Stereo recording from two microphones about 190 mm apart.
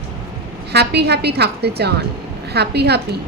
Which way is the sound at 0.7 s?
60° right (ahead or behind).